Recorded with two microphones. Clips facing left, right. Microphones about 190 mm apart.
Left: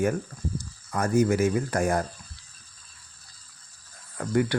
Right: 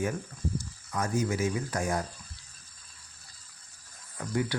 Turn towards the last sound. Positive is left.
turn(degrees=60)  # may be behind; listen again after turning